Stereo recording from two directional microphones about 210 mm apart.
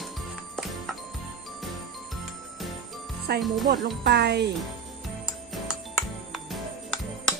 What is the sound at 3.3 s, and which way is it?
Speech, 50° right (ahead or behind).